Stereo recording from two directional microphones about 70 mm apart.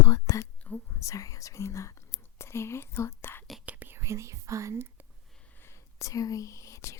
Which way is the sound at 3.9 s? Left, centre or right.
Right.